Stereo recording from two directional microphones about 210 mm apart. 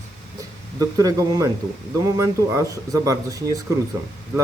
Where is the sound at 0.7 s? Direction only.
15° right (ahead or behind).